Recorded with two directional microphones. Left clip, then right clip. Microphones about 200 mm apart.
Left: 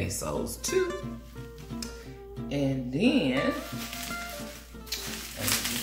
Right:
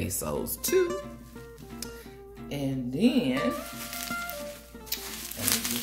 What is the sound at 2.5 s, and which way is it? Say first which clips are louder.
Music: left 3 dB; 45° right (ahead or behind).